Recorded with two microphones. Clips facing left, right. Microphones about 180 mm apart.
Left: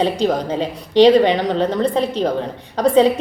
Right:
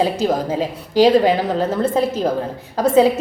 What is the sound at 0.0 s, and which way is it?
A woman's voice, 5° right (ahead or behind).